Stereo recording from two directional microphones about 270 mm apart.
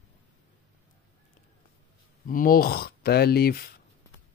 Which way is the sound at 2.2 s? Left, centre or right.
Left.